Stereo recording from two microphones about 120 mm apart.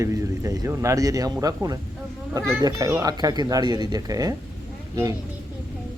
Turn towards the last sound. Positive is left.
turn(degrees=-25)  # may be behind; listen again after turning